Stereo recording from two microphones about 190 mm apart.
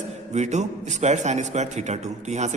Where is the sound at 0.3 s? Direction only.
35° right (ahead or behind).